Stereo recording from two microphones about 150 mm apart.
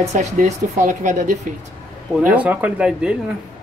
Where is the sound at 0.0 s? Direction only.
50° right (ahead or behind).